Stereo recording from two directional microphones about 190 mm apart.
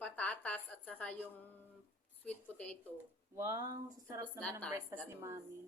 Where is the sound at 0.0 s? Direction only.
5° left (ahead or behind).